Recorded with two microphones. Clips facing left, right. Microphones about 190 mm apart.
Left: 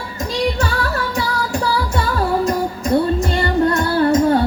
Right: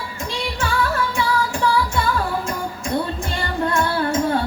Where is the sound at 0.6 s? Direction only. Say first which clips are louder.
Left 1 dB; 40° left (ahead or behind).